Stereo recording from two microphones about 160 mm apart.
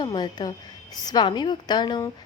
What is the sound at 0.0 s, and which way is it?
A woman's voice, 25° left (ahead or behind).